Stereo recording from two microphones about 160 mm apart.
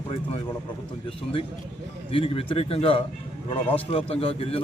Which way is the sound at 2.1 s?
35° left (ahead or behind).